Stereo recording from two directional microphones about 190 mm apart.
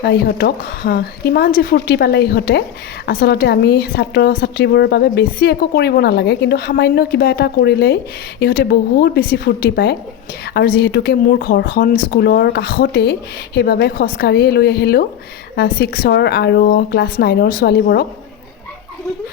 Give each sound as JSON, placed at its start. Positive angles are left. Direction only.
{"t": 0.0, "sound": "a woman's voice", "side_deg": 60}